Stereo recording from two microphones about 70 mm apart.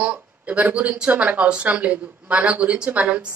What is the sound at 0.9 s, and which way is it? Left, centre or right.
A woman's voice, centre.